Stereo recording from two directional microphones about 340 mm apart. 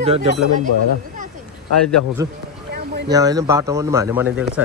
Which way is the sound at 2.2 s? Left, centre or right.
Centre.